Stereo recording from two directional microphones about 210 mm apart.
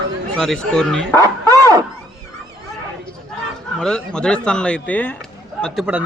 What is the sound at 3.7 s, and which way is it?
A man's voice, 5° left (ahead or behind).